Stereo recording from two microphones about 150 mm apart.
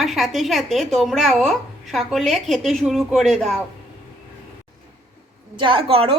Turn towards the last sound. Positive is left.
turn(degrees=-40)  # may be behind; listen again after turning